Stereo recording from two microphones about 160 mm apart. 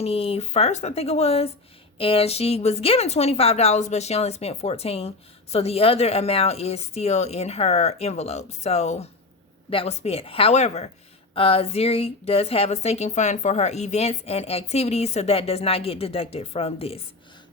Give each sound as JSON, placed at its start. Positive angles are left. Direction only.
{"t": 0.0, "sound": "a woman's voice", "side_deg": 40}